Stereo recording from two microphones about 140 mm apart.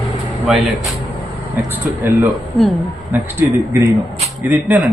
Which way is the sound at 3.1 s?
15° right (ahead or behind).